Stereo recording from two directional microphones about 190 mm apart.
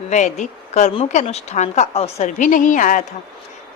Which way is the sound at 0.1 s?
40° left (ahead or behind).